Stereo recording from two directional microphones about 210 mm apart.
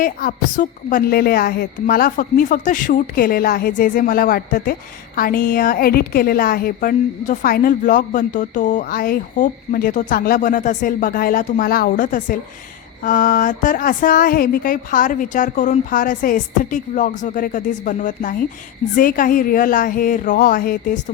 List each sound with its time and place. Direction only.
0.0 s a woman's voice: 45° left (ahead or behind)